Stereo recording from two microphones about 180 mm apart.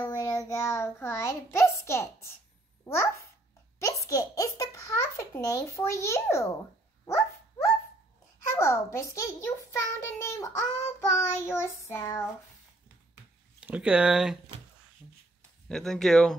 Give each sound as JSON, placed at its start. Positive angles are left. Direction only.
{"t": 0.1, "sound": "child singing", "side_deg": 20}
{"t": 1.8, "sound": "a sound", "side_deg": 15}
{"t": 2.8, "sound": "a child's voice", "side_deg": 15}
{"t": 3.8, "sound": "a sound", "side_deg": 15}
{"t": 7.1, "sound": "dog", "side_deg": 15}
{"t": 8.5, "sound": "child singing", "side_deg": 15}
{"t": 13.6, "sound": "speech", "side_deg": -5}
{"t": 15.7, "sound": "speech", "side_deg": 0}